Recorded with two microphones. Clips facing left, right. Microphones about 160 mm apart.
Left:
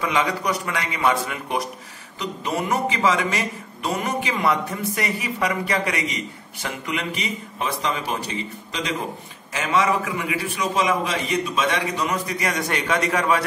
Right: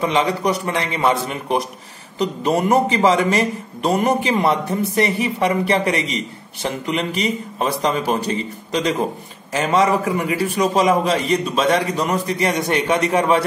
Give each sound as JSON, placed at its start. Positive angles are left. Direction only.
{"t": 0.0, "sound": "a man's voice", "side_deg": -30}